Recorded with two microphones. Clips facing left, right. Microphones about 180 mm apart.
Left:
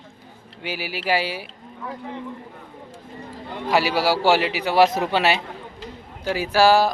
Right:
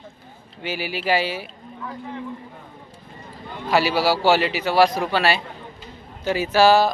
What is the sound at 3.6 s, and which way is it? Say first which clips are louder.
Speech: right 1 dB; 15° left (ahead or behind).